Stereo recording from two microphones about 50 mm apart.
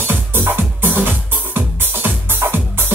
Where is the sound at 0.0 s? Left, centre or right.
Right.